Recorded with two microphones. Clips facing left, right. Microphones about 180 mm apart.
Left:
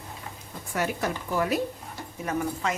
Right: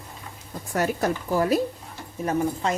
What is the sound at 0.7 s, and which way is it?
Speech, 40° right (ahead or behind).